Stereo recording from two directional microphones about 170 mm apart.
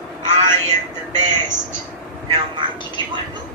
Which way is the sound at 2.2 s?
35° right (ahead or behind).